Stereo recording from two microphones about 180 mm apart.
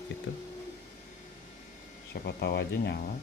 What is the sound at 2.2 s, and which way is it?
Speech, 65° left (ahead or behind).